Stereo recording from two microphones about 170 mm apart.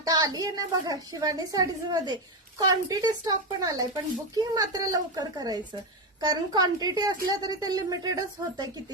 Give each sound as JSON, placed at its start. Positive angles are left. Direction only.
{"t": 0.0, "sound": "speech", "side_deg": -20}